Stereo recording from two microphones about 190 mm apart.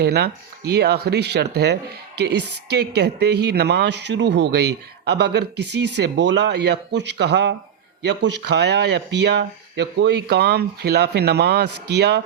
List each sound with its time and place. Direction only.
0.0 s speech: 60° right (ahead or behind)